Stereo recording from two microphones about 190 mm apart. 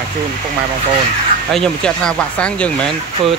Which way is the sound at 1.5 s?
5° left (ahead or behind).